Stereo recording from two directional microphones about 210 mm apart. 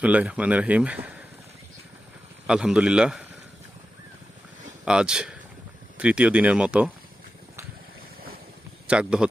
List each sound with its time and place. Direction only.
0.0 s speech: 5° right (ahead or behind)
2.5 s speech: 5° right (ahead or behind)
4.9 s speech: 5° right (ahead or behind)
8.9 s speech: 5° right (ahead or behind)